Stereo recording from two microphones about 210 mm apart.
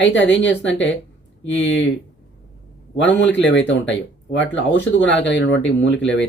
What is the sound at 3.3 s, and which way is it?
Speech, 60° left (ahead or behind).